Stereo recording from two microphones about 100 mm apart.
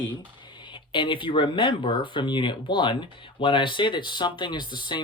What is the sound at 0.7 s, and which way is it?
Speech, 55° left (ahead or behind).